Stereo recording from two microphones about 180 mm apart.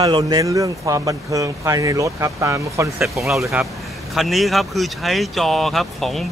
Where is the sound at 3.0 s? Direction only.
Centre (ahead or behind).